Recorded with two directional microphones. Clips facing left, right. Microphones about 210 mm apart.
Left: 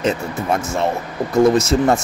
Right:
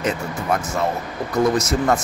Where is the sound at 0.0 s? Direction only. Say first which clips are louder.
Left 3 dB; 25° left (ahead or behind).